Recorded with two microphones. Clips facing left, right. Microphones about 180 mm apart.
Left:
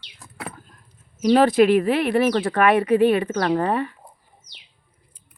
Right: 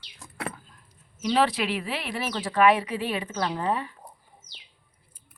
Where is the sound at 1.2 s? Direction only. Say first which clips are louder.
Left 9 dB; 50° left (ahead or behind).